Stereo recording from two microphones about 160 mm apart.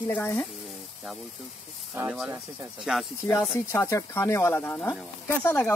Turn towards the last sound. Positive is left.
turn(degrees=15)  # may be behind; listen again after turning